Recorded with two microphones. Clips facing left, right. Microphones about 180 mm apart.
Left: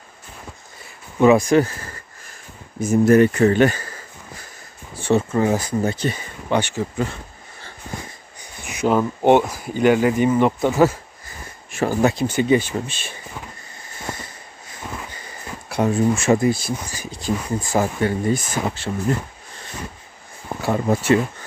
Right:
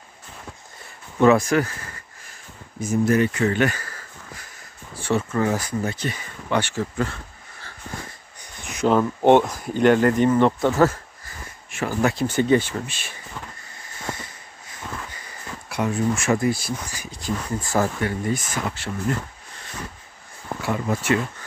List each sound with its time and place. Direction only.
1.2 s speech: 20° left (ahead or behind)
2.8 s speech: 50° left (ahead or behind); by 6.6 s 25° left (ahead or behind)
6.6 s speech: 15° left (ahead or behind)
7.6 s wheeze: 15° left (ahead or behind)
8.5 s speech: 5° left (ahead or behind)
11.7 s a sound: 35° left (ahead or behind)
12.0 s speech: 20° left (ahead or behind)
14.9 s a sound: 15° left (ahead or behind)
15.7 s speech: 30° left (ahead or behind)
17.5 s speech: 15° left (ahead or behind)
18.0 s speech: 30° left (ahead or behind)
20.6 s speech: 35° left (ahead or behind)